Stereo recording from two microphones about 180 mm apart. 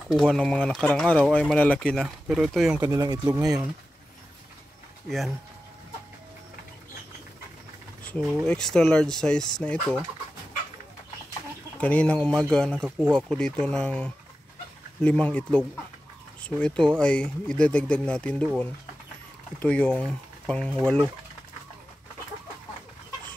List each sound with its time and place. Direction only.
0.1 s speech: centre (ahead or behind)
2.8 s speech: 20° right (ahead or behind)
8.0 s speech: 5° left (ahead or behind)
11.8 s speech: 5° left (ahead or behind)